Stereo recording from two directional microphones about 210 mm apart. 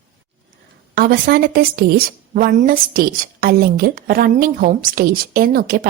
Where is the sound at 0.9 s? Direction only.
45° right (ahead or behind).